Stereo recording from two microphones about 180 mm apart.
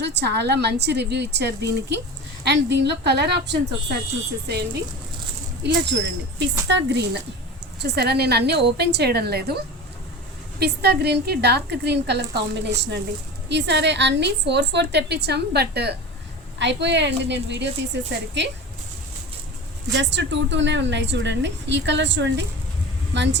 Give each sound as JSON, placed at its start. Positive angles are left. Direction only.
{"t": 0.0, "sound": "a woman's voice", "side_deg": -70}
{"t": 10.6, "sound": "a woman's voice", "side_deg": -65}
{"t": 16.6, "sound": "a woman's voice", "side_deg": -75}
{"t": 19.9, "sound": "a woman's voice", "side_deg": -85}